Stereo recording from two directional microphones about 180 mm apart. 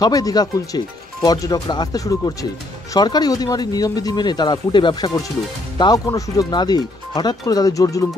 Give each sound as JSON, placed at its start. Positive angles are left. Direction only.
{"t": 0.0, "sound": "speech", "side_deg": 20}